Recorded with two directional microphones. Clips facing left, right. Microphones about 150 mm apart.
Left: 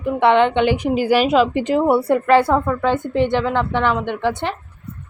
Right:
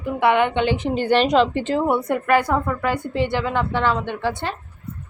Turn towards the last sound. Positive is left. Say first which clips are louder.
# left 4 dB
turn(degrees=20)  # may be behind; listen again after turning